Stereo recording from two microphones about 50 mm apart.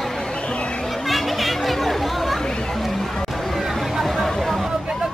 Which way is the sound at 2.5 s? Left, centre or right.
Centre.